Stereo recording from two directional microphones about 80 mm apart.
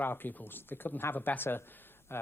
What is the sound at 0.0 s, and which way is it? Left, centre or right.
Speech, left.